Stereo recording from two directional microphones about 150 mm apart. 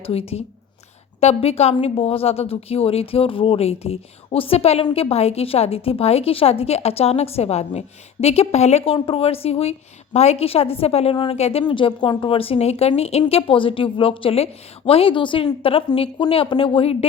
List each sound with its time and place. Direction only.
0.0 s a woman's voice: 40° left (ahead or behind)
11.6 s a woman's voice: 30° left (ahead or behind)